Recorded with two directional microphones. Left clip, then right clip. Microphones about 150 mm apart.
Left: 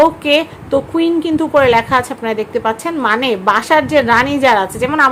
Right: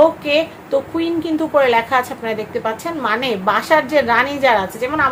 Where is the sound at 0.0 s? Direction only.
40° left (ahead or behind).